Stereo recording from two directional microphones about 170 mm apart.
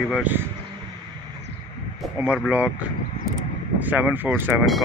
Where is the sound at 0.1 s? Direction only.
10° right (ahead or behind).